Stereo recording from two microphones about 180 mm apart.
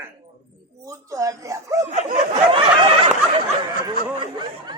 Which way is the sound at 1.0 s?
15° right (ahead or behind).